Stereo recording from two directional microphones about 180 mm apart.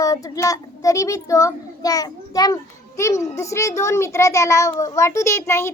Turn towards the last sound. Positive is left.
turn(degrees=15)  # may be behind; listen again after turning